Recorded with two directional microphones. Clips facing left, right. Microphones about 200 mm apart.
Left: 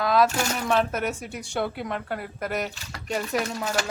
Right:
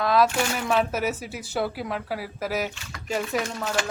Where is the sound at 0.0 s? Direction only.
Centre (ahead or behind).